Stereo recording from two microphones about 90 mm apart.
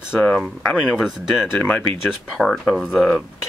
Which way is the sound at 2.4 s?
Centre (ahead or behind).